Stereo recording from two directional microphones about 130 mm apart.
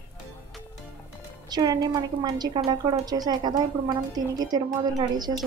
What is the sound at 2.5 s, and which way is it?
A woman's voice, 35° right (ahead or behind).